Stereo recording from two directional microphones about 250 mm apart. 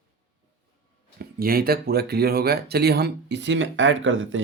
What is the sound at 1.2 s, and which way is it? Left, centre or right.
Speech, right.